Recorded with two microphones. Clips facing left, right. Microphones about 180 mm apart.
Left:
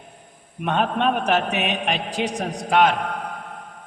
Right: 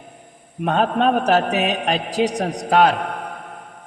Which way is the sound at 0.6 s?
40° right (ahead or behind).